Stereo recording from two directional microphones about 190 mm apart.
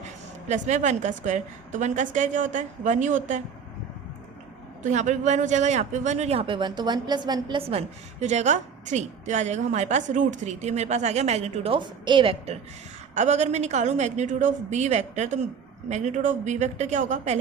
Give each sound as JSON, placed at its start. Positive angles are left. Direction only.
{"t": 0.4, "sound": "speech", "side_deg": -40}
{"t": 4.8, "sound": "speech", "side_deg": -40}